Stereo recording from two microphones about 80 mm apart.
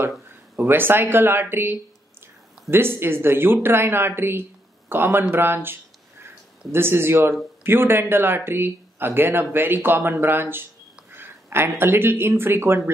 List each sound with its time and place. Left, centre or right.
0.6 s speech: right